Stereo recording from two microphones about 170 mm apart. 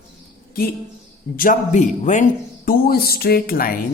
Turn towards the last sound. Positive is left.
turn(degrees=60)  # may be behind; listen again after turning